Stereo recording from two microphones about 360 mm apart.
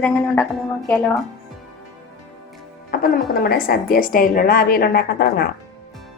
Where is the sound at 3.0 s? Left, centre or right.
Left.